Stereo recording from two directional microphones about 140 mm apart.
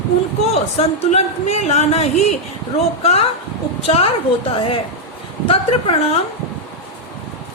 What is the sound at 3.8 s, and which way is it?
A woman's voice, 45° left (ahead or behind).